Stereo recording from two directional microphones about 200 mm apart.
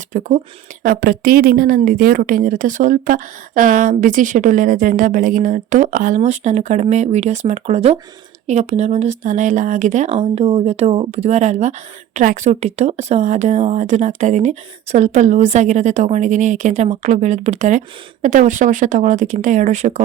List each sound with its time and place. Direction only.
0.1 s a woman's voice: 35° right (ahead or behind)